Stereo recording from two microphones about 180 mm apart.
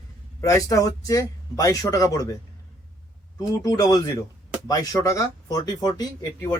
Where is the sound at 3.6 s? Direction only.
20° left (ahead or behind).